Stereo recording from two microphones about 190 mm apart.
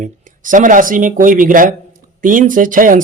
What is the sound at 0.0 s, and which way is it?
Speech, 45° right (ahead or behind).